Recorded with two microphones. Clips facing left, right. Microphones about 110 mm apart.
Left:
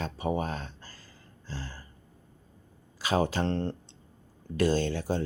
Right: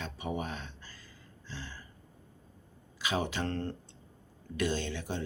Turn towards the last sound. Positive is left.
turn(degrees=40)  # may be behind; listen again after turning